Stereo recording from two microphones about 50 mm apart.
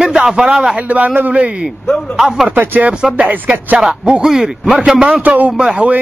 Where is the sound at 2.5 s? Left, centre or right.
Right.